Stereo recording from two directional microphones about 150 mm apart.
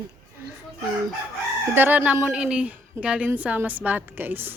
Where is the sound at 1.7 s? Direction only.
10° right (ahead or behind).